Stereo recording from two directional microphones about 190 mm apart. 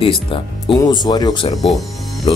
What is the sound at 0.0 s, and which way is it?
Speech, 25° left (ahead or behind).